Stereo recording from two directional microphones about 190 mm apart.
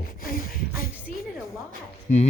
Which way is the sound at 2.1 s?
40° left (ahead or behind).